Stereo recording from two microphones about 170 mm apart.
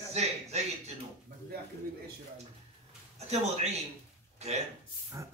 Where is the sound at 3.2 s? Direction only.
40° right (ahead or behind).